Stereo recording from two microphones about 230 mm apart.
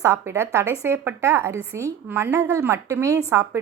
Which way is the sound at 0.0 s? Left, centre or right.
Centre.